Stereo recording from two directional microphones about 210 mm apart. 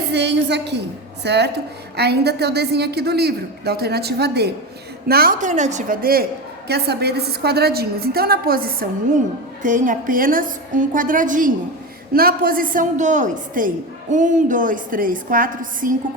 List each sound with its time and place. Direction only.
0.1 s a woman's voice: 55° right (ahead or behind)